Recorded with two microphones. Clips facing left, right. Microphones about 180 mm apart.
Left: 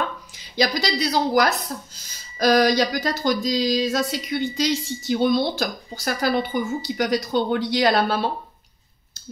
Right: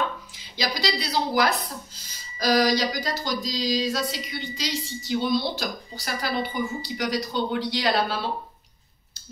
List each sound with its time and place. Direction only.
0.6 s speech: 45° left (ahead or behind)